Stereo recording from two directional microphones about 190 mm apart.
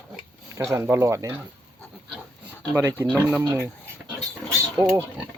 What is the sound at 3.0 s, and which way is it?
Speech, 5° right (ahead or behind).